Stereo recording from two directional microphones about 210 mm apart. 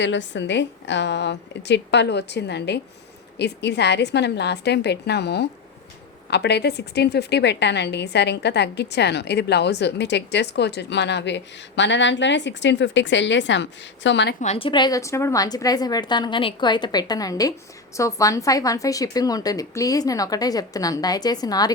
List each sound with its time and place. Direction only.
0.0 s a woman's voice: 60° left (ahead or behind)
14.4 s a woman's voice: 25° left (ahead or behind)